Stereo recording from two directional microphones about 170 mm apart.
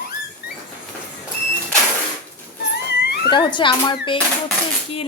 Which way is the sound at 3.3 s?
30° left (ahead or behind).